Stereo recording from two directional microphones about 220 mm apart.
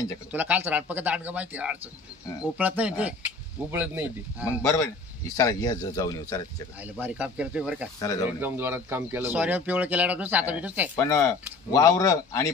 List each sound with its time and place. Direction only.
0.3 s speech: 5° right (ahead or behind)
4.6 s speech: 15° left (ahead or behind)
7.0 s speech: 5° right (ahead or behind)
8.0 s speech: 15° left (ahead or behind)
8.4 s speech: 10° right (ahead or behind)
11.0 s speech: 15° left (ahead or behind)